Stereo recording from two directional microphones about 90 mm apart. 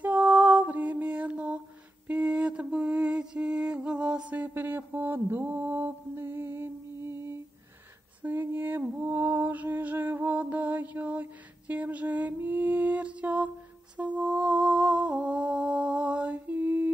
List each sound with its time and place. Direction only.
0.0 s mantra: 20° right (ahead or behind)
8.2 s a sound: 20° right (ahead or behind)
13.9 s humming: 15° right (ahead or behind)